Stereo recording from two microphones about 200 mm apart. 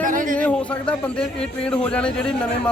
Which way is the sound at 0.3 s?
5° left (ahead or behind).